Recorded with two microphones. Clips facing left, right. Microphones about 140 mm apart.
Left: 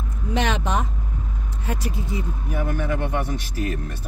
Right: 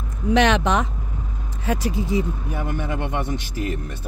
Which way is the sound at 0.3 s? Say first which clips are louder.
Right 6 dB; 90° right.